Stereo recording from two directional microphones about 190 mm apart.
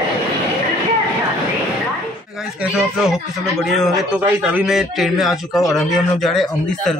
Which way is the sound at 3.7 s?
5° right (ahead or behind).